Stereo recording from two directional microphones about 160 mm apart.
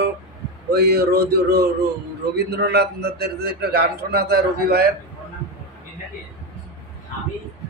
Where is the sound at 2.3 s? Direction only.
90° right; by 4.9 s 75° right (ahead or behind).